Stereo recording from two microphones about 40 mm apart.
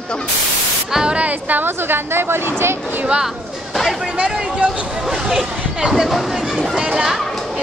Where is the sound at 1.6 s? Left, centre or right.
Right.